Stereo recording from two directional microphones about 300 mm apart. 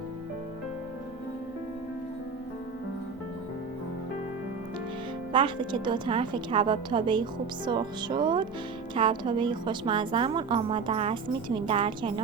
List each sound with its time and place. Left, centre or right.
5.3 s a woman's voice: centre